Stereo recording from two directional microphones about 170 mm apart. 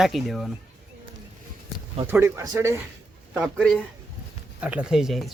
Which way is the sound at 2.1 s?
15° right (ahead or behind).